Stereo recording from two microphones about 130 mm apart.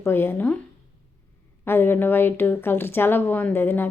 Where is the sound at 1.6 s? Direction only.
15° left (ahead or behind).